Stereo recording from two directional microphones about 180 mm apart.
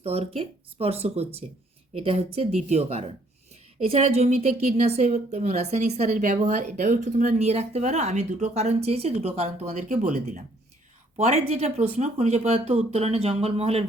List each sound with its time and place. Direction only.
0.0 s speech: 35° right (ahead or behind)